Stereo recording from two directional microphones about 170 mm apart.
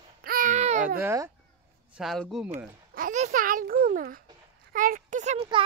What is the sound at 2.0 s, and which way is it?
Speech, centre (ahead or behind).